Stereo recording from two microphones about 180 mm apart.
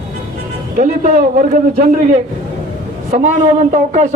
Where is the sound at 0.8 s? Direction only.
45° right (ahead or behind).